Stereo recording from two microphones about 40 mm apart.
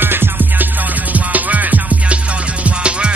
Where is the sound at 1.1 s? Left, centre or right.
Right.